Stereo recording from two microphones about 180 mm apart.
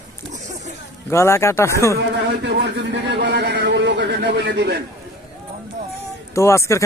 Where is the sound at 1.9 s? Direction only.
70° right (ahead or behind).